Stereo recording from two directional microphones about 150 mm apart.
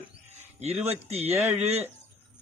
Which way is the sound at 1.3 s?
15° right (ahead or behind).